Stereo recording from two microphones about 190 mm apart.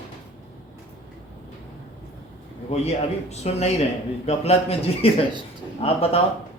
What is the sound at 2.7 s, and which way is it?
Speech, 30° left (ahead or behind).